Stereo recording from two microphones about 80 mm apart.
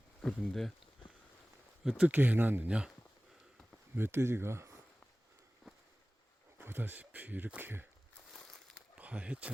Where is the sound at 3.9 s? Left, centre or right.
Right.